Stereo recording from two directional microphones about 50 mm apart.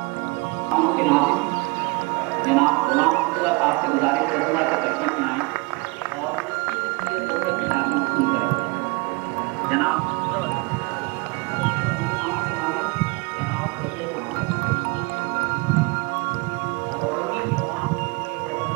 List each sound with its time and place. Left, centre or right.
0.7 s music: right
2.4 s music: right
7.3 s music: right
9.7 s music: right